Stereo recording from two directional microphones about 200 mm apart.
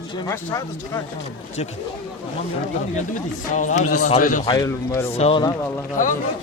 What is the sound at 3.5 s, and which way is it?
Speech, 40° left (ahead or behind).